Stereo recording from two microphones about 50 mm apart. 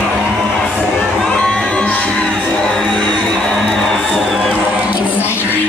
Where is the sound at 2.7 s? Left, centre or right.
Centre.